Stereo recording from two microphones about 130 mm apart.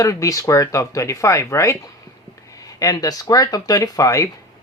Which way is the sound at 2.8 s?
25° left (ahead or behind).